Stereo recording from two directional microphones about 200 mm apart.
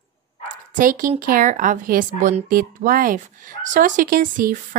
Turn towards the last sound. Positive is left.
turn(degrees=-45)  # may be behind; listen again after turning